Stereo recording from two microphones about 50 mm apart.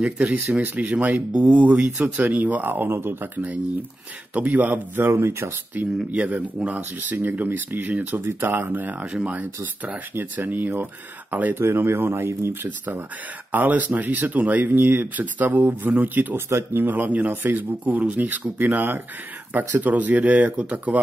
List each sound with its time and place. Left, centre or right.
0.0 s a man's voice: right
4.3 s speech: right
5.0 s speech: right
5.7 s speech: right
6.1 s a man's voice: right
6.8 s speech: right
9.0 s a man's voice: right
11.5 s speech: right
12.6 s speech: right
16.3 s speech: right
16.9 s speech: right